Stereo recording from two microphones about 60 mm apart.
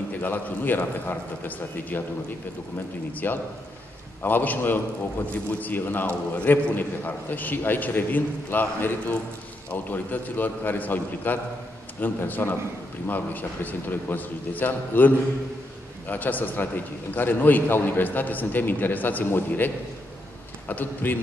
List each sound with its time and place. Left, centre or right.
0.2 s a man's voice: left
3.1 s a man's voice: left